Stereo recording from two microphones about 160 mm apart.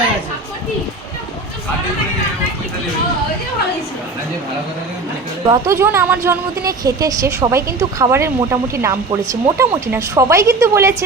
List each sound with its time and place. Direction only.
5.5 s a woman's voice: 20° right (ahead or behind)